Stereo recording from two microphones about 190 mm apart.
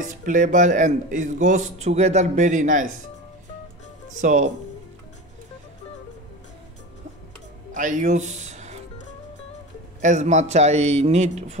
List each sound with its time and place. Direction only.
0.0 s speech: 45° right (ahead or behind)
4.2 s speech: 40° right (ahead or behind)
7.7 s speech: 40° right (ahead or behind)
10.0 s speech: 40° right (ahead or behind)